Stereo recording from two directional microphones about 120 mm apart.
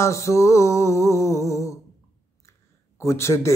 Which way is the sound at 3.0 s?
25° left (ahead or behind).